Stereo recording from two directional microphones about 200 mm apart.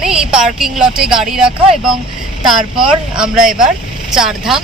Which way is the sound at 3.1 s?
5° right (ahead or behind).